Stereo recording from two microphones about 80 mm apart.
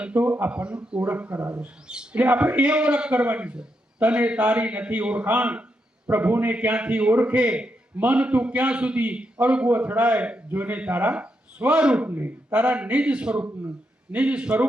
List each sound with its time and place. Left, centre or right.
0.0 s a man's voice: centre
12.0 s a man's voice: right